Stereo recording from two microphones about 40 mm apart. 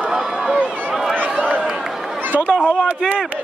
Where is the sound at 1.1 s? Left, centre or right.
Right.